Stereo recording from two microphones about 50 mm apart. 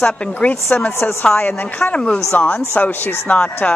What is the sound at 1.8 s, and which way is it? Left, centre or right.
Speech, left.